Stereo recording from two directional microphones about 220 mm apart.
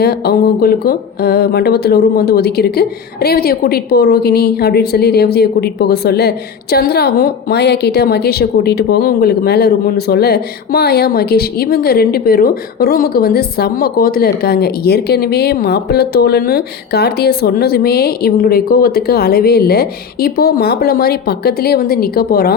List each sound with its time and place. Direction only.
0.0 s speech: 45° left (ahead or behind)